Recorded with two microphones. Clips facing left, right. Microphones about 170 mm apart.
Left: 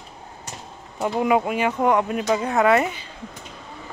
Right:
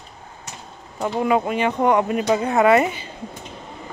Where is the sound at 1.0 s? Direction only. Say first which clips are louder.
Even; 5° left (ahead or behind).